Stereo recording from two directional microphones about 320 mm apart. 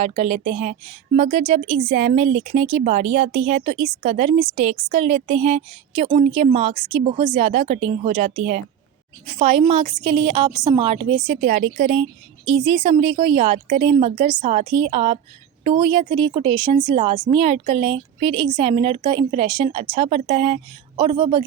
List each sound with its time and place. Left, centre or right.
0.0 s a woman's voice: centre